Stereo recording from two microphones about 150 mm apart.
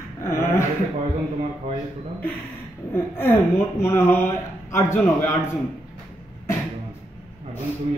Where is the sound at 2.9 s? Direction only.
15° left (ahead or behind).